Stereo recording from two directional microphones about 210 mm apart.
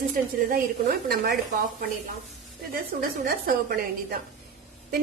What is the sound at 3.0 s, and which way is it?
Speech, 45° right (ahead or behind).